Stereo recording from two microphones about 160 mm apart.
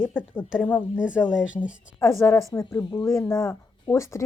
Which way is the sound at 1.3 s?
5° right (ahead or behind).